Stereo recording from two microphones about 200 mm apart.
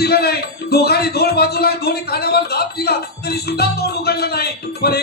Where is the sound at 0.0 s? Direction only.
50° left (ahead or behind).